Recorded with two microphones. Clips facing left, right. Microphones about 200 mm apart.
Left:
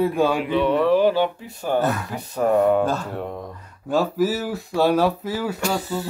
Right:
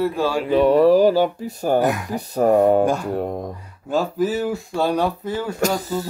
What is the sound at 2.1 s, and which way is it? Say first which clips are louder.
Speech: right 3 dB; 40° right (ahead or behind).